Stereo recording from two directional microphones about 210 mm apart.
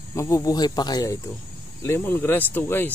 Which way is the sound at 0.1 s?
15° left (ahead or behind).